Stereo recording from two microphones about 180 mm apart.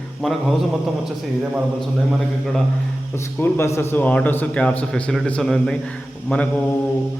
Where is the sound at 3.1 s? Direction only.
15° left (ahead or behind).